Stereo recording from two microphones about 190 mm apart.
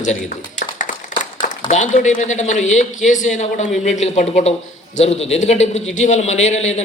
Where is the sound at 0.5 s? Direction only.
40° left (ahead or behind).